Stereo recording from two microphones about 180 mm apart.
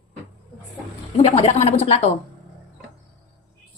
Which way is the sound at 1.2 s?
35° left (ahead or behind).